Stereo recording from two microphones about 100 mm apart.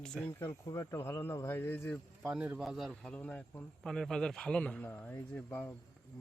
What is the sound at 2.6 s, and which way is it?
A man's voice, centre (ahead or behind).